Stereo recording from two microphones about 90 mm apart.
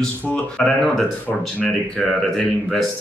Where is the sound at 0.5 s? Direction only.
5° left (ahead or behind).